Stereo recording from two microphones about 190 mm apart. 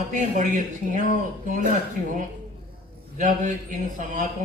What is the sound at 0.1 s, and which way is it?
Speech, 40° right (ahead or behind).